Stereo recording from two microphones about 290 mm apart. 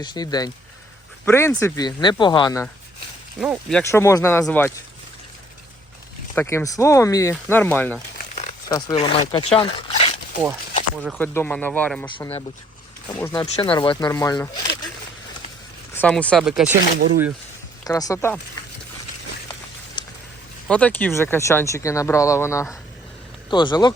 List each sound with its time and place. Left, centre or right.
0.0 s speech: centre
3.4 s speech: centre
6.3 s speech: centre
8.4 s speech: centre
9.6 s a sound: centre
11.0 s speech: centre
12.0 s speech: centre
15.9 s speech: centre
17.8 s speech: centre
20.0 s a sound: centre
20.7 s speech: centre